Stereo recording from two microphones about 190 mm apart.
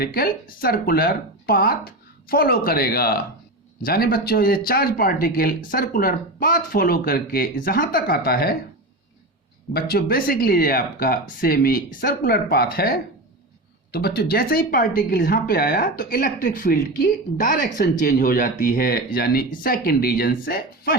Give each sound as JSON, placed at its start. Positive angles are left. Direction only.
{"t": 0.0, "sound": "speech", "side_deg": 55}
{"t": 9.7, "sound": "speech", "side_deg": 55}